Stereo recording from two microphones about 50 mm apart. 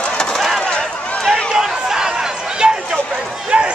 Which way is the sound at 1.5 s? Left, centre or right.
Centre.